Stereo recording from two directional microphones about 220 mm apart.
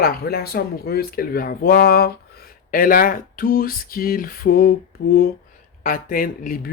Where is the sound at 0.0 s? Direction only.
45° left (ahead or behind).